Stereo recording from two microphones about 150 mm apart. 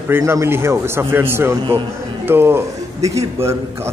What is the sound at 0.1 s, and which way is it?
A man's voice, 15° right (ahead or behind).